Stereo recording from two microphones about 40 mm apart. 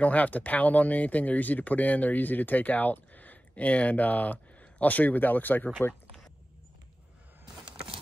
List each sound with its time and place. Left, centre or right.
0.0 s speech: left